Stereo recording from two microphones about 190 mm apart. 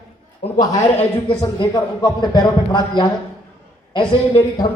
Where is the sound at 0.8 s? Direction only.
30° left (ahead or behind).